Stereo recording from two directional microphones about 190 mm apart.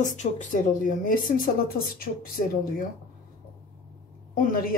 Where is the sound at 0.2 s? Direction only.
40° left (ahead or behind).